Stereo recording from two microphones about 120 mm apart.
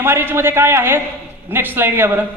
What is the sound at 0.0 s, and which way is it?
A man's voice, 20° right (ahead or behind).